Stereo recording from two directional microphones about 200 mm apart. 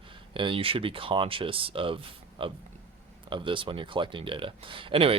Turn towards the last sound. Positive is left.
turn(degrees=-25)  # may be behind; listen again after turning